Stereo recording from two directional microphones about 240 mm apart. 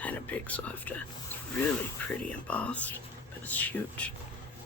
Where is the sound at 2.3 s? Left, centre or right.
Centre.